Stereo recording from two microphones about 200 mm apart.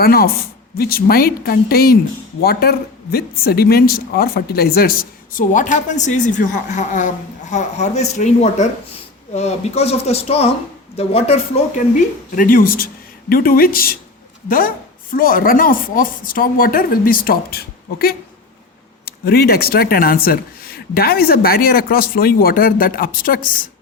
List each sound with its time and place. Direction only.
0.0 s speech: 50° left (ahead or behind); by 11.3 s 30° left (ahead or behind)
12.4 s speech: 45° left (ahead or behind)